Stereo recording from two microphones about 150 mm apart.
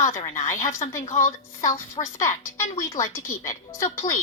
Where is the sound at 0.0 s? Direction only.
20° left (ahead or behind).